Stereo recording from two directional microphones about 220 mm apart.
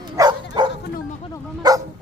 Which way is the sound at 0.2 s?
20° right (ahead or behind).